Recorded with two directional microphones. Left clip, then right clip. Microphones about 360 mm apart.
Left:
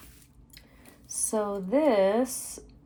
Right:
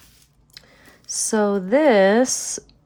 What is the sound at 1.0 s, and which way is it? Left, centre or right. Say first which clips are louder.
Speech: right 9 dB; right.